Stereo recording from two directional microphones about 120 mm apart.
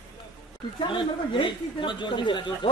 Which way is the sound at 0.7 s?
40° left (ahead or behind).